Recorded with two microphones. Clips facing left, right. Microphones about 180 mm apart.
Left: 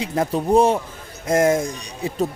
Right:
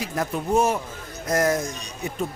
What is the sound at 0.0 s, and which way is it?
Speech, 30° left (ahead or behind).